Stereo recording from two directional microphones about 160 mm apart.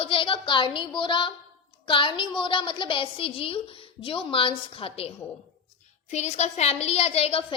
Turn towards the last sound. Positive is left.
turn(degrees=35)  # may be behind; listen again after turning